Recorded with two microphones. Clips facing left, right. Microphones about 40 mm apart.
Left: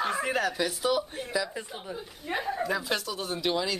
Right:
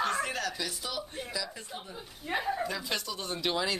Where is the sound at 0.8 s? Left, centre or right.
Centre.